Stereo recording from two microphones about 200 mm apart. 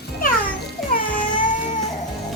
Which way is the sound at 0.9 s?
45° left (ahead or behind).